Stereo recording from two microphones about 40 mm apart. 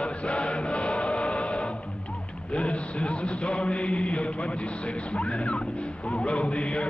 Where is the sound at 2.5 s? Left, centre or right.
Left.